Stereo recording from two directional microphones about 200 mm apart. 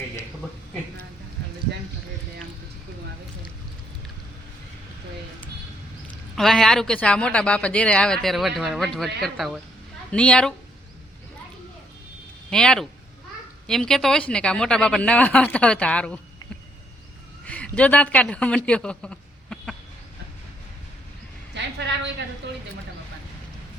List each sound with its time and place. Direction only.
6.3 s speech: centre (ahead or behind)
12.5 s speech: 5° left (ahead or behind)
17.4 s a man's voice: 5° left (ahead or behind)
21.5 s a sound: 60° right (ahead or behind)